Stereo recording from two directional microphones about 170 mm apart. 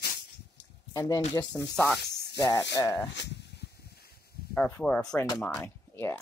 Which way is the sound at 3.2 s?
90° left.